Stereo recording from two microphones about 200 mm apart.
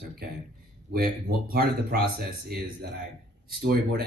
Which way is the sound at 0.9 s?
50° right (ahead or behind).